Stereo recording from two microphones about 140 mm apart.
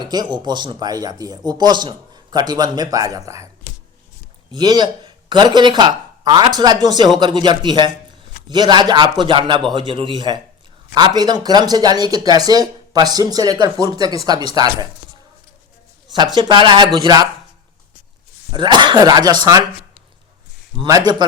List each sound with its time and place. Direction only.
0.0 s speech: 30° right (ahead or behind)
4.5 s speech: 30° right (ahead or behind)
16.1 s speech: 30° right (ahead or behind)
18.5 s speech: 35° right (ahead or behind)
20.7 s speech: 25° right (ahead or behind)